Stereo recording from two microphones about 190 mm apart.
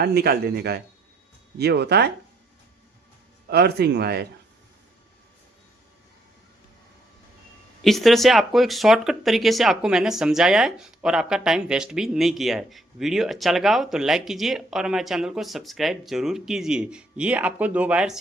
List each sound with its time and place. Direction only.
0.0 s speech: 55° right (ahead or behind)
3.5 s speech: 60° right (ahead or behind)
7.9 s speech: centre (ahead or behind)